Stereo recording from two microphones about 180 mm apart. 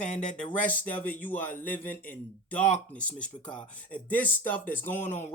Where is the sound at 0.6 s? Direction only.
10° left (ahead or behind).